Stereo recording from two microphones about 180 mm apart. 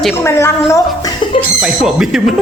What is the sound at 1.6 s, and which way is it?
Speech, 5° right (ahead or behind).